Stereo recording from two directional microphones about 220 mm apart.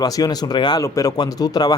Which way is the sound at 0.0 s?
15° left (ahead or behind).